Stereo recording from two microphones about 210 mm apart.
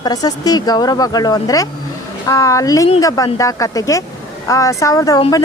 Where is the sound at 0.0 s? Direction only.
20° left (ahead or behind).